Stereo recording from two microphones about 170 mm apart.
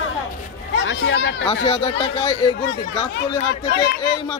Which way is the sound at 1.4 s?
35° left (ahead or behind).